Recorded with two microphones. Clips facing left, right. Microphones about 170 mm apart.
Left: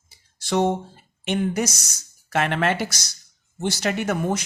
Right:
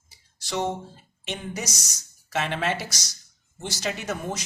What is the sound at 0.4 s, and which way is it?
Speech, 55° left (ahead or behind).